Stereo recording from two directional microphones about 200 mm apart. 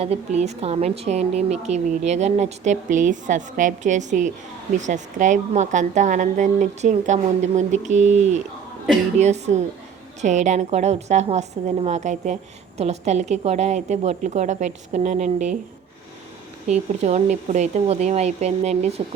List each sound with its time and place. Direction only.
0.0 s a woman's voice: 30° right (ahead or behind)
17.0 s a woman's voice: 35° right (ahead or behind)